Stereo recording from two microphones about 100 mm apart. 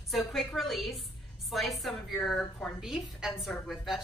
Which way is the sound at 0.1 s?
Centre (ahead or behind).